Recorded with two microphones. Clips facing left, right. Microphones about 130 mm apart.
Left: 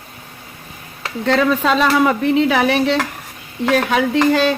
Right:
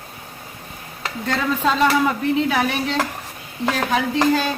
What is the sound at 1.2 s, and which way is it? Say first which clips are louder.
Speech: left 6 dB; 80° left.